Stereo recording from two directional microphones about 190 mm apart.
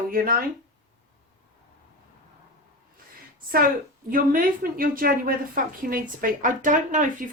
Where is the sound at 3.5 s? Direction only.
50° right (ahead or behind).